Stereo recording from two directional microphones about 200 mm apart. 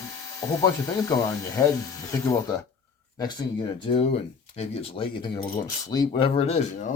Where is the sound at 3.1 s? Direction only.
20° left (ahead or behind).